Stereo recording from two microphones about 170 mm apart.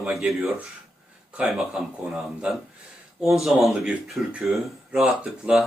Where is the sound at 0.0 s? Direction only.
5° right (ahead or behind).